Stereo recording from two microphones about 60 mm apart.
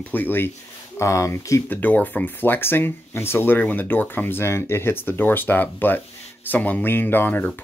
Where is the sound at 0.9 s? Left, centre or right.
Left.